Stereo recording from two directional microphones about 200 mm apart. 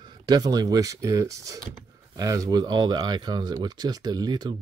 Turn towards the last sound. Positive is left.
turn(degrees=-20)  # may be behind; listen again after turning